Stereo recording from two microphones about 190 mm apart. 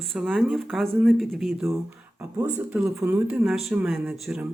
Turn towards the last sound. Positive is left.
turn(degrees=0)  # may be behind; listen again after turning